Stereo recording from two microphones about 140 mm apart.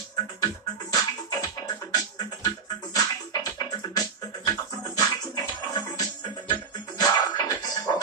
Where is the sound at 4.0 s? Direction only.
30° left (ahead or behind).